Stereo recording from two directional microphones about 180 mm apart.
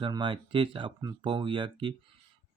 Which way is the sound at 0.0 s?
25° right (ahead or behind).